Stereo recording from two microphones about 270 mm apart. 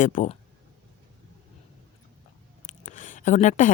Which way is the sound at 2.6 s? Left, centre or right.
Left.